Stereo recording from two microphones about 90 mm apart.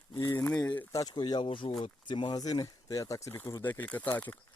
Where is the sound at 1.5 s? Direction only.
90° left.